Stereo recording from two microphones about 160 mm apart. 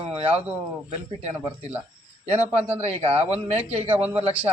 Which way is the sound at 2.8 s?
40° right (ahead or behind).